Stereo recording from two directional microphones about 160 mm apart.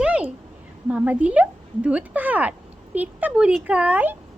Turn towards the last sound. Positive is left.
turn(degrees=-10)  # may be behind; listen again after turning